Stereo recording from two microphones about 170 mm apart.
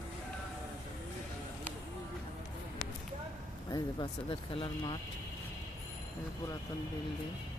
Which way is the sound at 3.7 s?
30° left (ahead or behind).